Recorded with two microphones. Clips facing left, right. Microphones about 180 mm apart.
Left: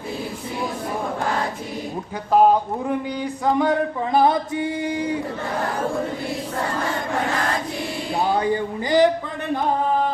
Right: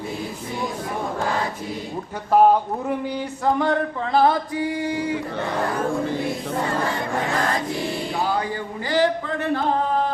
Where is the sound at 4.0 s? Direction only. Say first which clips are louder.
Even; 15° left (ahead or behind).